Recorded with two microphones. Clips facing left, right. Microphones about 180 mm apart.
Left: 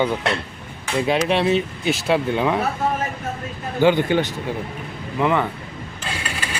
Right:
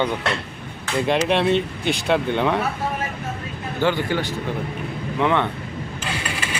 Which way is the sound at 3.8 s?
20° left (ahead or behind).